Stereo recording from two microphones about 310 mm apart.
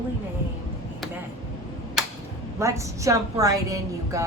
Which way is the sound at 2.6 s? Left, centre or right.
Centre.